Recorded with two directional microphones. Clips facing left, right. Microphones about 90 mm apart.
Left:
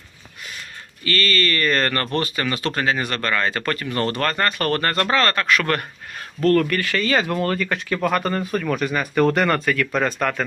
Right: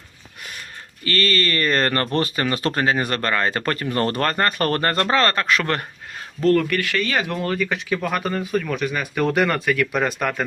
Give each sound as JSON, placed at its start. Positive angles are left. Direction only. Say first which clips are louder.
{"t": 1.0, "sound": "speech", "louder": "even", "side_deg": -35}
{"t": 6.4, "sound": "speech", "louder": "even", "side_deg": -5}